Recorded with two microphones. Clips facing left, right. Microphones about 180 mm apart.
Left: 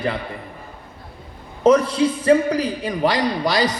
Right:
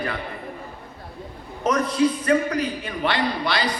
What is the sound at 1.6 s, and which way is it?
A man's voice, 30° left (ahead or behind).